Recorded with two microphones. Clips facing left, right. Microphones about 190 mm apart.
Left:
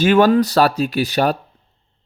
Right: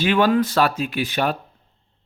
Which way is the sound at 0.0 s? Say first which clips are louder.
Left 5 dB; 45° left (ahead or behind).